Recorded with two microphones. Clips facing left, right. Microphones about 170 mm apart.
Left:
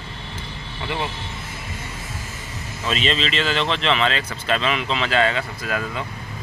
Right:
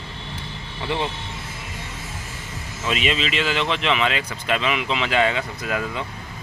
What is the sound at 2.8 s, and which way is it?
Speech, 10° right (ahead or behind).